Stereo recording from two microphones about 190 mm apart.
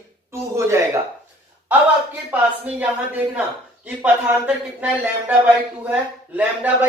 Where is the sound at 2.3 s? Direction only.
5° right (ahead or behind).